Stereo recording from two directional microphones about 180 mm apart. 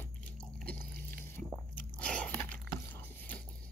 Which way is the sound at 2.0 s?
5° left (ahead or behind).